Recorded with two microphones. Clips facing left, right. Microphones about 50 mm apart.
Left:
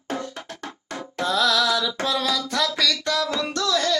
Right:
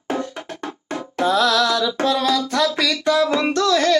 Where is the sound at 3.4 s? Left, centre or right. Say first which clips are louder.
Right 6 dB; right.